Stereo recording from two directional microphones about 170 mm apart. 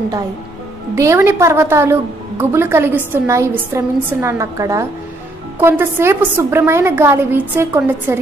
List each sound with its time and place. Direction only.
0.9 s a woman's voice: 15° right (ahead or behind)